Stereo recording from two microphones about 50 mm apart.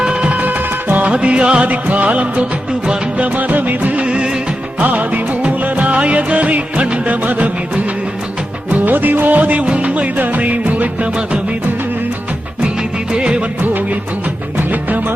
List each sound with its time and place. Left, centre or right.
0.0 s music: right
4.8 s music of bollywood: right
8.7 s music: right
13.1 s music of bollywood: centre
14.7 s music: right